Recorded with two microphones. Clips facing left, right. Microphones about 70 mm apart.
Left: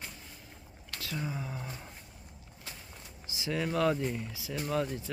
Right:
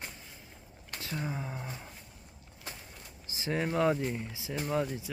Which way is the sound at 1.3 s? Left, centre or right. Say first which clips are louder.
Right 1 dB; right.